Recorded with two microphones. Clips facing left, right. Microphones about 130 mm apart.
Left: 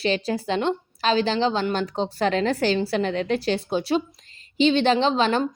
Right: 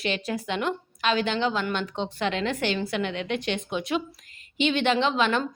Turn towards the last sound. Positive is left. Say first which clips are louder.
# left 3 dB
turn(degrees=30)  # may be behind; listen again after turning